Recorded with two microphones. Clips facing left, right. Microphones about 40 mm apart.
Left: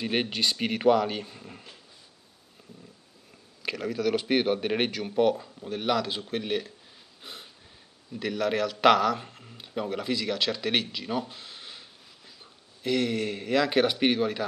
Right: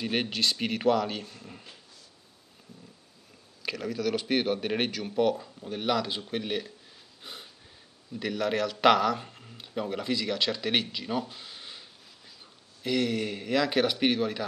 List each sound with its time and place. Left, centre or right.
0.0 s a man's voice: centre
3.6 s a man's voice: centre